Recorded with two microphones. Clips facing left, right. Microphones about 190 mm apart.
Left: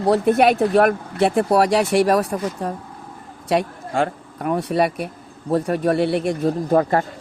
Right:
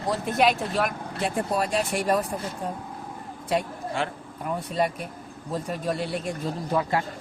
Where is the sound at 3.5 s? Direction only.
80° left.